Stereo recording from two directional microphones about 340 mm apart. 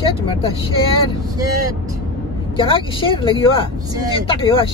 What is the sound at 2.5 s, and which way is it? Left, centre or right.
Speech, centre.